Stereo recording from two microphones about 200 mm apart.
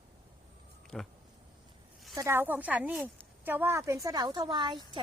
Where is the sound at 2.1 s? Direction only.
15° right (ahead or behind).